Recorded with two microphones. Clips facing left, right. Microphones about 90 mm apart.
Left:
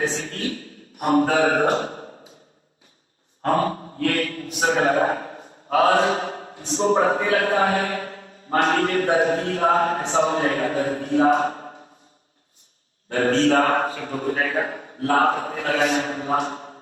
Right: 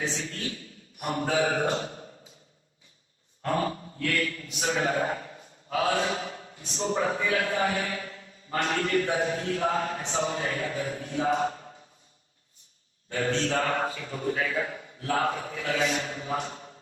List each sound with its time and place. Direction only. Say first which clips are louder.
0.0 s a man's voice: left 7 dB; 50° left (ahead or behind)
3.4 s a man's voice: left 7 dB; 45° left (ahead or behind)
13.1 s a man's voice: left 9 dB; 45° left (ahead or behind)